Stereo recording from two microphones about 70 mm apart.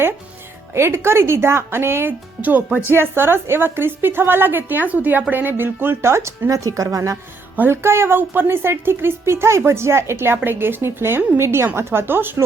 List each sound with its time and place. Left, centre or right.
0.7 s a woman's voice: right
7.7 s a woman's voice: right